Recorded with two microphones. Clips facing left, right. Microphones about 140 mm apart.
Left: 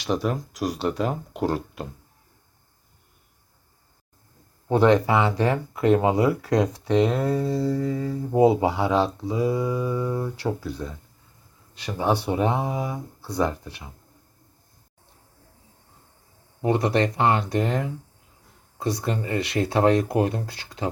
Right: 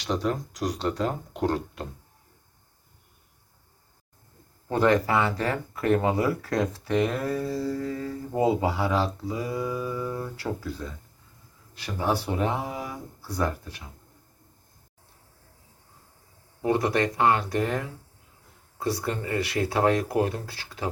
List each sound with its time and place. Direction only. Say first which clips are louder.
0.0 s speech: left 2 dB; 10° left (ahead or behind)
4.7 s speech: left 4 dB; 15° left (ahead or behind)
16.6 s speech: left 2 dB; 25° left (ahead or behind)